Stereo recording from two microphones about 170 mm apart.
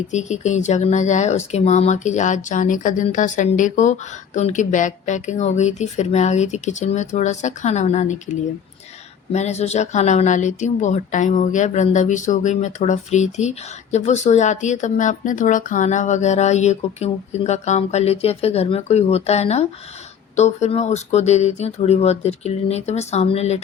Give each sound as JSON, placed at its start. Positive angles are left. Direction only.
{"t": 0.1, "sound": "a woman's voice", "side_deg": 45}